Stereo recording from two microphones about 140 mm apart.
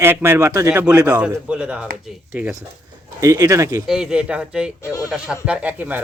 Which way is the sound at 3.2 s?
20° right (ahead or behind).